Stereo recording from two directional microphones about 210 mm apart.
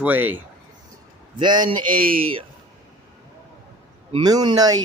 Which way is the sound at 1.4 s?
20° right (ahead or behind).